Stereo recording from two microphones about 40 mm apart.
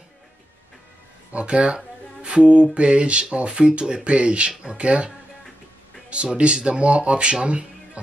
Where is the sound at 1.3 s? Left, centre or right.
Right.